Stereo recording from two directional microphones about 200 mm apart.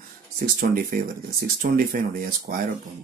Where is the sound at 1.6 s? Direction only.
45° right (ahead or behind).